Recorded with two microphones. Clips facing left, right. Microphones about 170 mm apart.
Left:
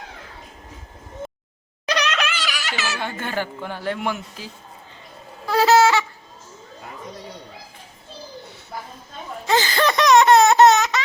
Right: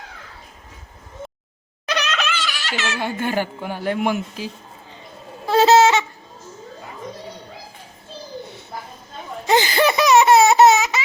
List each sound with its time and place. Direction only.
2.3 s a sound: 5° left (ahead or behind)
3.0 s speech: 10° right (ahead or behind)
5.5 s goose: 25° right (ahead or behind)
9.5 s laughter: 15° right (ahead or behind)